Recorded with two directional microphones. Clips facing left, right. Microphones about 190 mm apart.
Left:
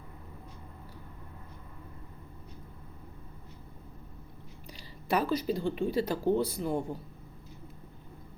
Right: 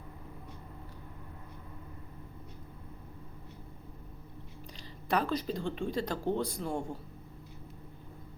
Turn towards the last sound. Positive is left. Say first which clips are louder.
# left 4 dB
turn(degrees=5)  # may be behind; listen again after turning